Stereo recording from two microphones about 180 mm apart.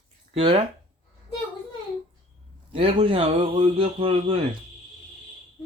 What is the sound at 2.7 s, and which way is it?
A man's voice, 30° right (ahead or behind).